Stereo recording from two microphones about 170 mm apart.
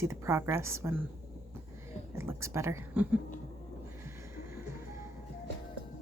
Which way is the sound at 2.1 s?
15° right (ahead or behind).